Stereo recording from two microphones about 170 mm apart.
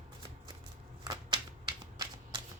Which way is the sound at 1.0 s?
25° right (ahead or behind).